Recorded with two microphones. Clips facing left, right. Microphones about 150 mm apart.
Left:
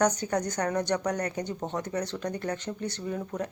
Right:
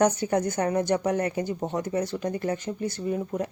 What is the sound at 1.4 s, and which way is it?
Speech, 5° right (ahead or behind).